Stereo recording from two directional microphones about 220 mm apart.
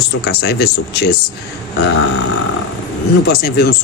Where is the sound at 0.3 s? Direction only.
45° left (ahead or behind).